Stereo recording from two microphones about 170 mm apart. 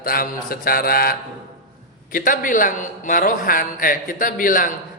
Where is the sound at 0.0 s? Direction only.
60° left (ahead or behind).